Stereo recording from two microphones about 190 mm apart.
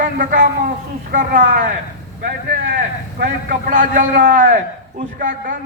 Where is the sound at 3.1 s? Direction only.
45° right (ahead or behind).